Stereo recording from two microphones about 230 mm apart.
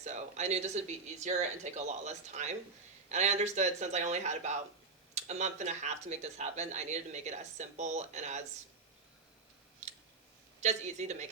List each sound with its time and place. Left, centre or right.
0.0 s speech: right
10.6 s speech: right